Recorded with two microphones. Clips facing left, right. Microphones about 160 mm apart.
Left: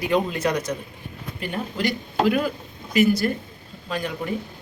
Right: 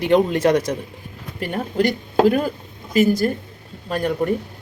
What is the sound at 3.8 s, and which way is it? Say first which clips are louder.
Speech: right 7 dB; 55° right (ahead or behind).